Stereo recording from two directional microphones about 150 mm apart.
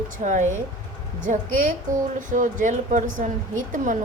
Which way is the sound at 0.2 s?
55° right (ahead or behind).